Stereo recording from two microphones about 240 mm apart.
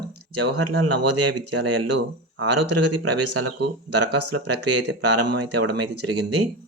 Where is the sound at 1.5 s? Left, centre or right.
Right.